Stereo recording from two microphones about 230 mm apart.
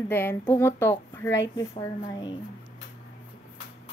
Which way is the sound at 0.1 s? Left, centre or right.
Centre.